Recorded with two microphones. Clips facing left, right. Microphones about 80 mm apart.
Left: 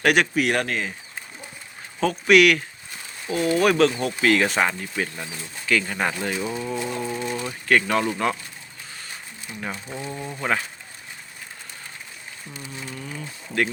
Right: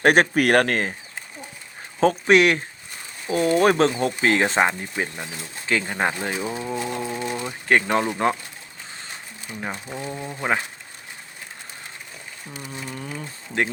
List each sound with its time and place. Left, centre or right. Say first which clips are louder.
0.0 s speech: right 3 dB; right
2.0 s speech: even; right; by 6.7 s centre
7.0 s a sound: even; centre
7.7 s speech: right 1 dB; right
9.5 s speech: right 1 dB; right
9.9 s speech: right 1 dB; centre
12.6 s speech: right 2 dB; right